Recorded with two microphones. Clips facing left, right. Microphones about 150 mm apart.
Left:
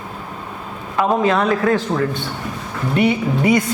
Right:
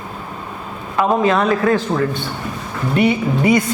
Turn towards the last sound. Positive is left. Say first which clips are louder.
# right 1 dB
turn(degrees=-10)  # may be behind; listen again after turning